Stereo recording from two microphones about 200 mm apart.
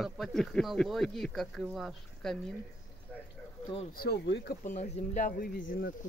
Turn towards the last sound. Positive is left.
turn(degrees=45)  # may be behind; listen again after turning